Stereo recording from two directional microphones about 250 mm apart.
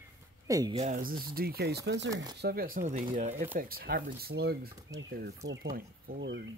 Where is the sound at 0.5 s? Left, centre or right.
Centre.